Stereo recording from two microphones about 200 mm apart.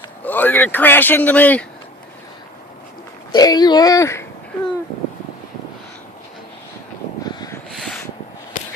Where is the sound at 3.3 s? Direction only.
20° left (ahead or behind).